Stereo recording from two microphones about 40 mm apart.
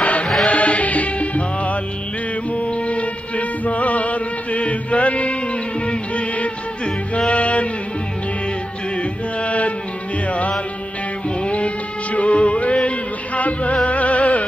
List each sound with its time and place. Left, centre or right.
0.0 s music: left
8.9 s mantra: left
11.2 s music: left